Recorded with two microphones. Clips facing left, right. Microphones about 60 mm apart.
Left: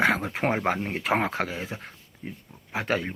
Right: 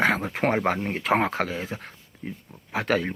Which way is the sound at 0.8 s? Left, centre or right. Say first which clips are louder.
Right 2 dB; right.